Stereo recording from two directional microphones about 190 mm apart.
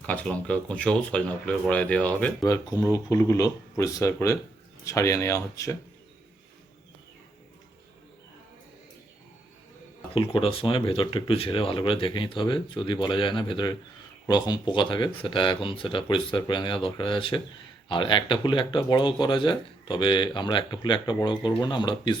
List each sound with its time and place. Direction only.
0.0 s speech: 5° left (ahead or behind)
2.4 s speech: 20° left (ahead or behind)
10.2 s speech: 30° left (ahead or behind)